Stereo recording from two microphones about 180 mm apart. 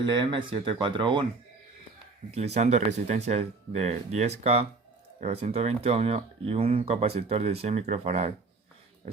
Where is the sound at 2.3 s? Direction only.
35° right (ahead or behind).